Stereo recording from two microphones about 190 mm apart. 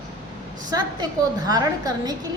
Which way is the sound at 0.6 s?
20° right (ahead or behind).